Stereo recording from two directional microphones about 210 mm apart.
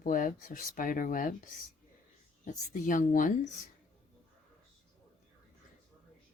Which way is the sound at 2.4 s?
35° left (ahead or behind).